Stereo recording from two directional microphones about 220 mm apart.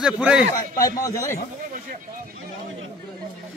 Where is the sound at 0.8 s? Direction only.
15° left (ahead or behind).